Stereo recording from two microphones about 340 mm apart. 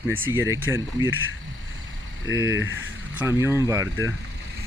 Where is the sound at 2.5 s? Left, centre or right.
Right.